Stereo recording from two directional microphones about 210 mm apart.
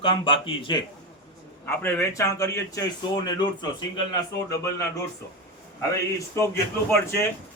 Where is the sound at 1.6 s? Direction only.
10° left (ahead or behind).